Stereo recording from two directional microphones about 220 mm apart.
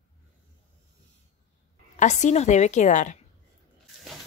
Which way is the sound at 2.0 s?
35° left (ahead or behind).